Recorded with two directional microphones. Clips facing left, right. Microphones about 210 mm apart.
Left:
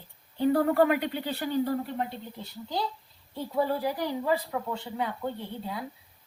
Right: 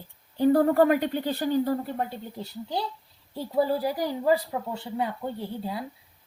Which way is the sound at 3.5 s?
40° right (ahead or behind).